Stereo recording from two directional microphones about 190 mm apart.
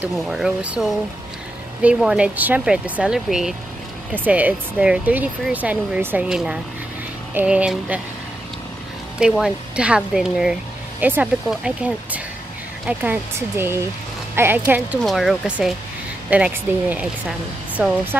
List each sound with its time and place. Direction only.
0.0 s speech: 5° right (ahead or behind)
9.2 s speech: 5° right (ahead or behind)